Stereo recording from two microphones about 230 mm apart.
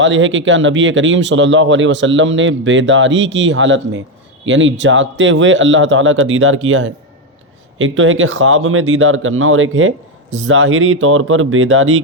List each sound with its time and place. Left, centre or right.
0.0 s a man's voice: right